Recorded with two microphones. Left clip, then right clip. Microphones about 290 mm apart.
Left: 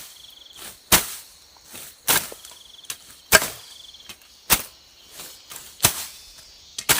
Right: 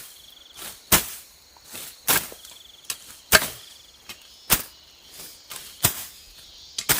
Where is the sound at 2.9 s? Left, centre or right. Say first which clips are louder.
Right 2 dB; centre.